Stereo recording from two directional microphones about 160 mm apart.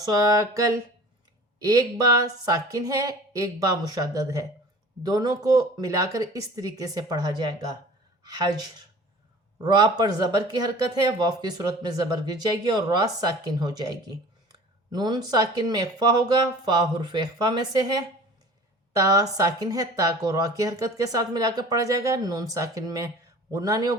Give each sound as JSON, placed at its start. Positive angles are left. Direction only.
{"t": 0.0, "sound": "a woman's voice", "side_deg": -25}
{"t": 10.0, "sound": "a woman's voice", "side_deg": -25}